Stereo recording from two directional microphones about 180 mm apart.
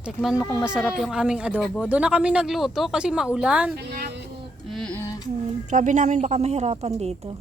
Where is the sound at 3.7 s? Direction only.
60° right (ahead or behind).